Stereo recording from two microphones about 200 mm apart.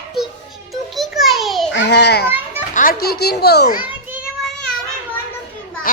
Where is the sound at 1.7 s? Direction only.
60° left (ahead or behind).